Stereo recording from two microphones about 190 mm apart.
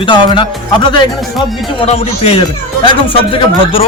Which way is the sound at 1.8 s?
35° left (ahead or behind).